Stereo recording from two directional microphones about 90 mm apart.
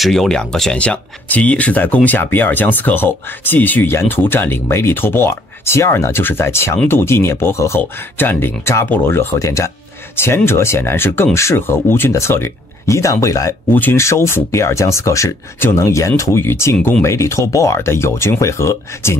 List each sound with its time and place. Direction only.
0.0 s speech: centre (ahead or behind); by 9.3 s 25° left (ahead or behind)
9.4 s speech: 35° left (ahead or behind)
13.7 s speech: 20° left (ahead or behind)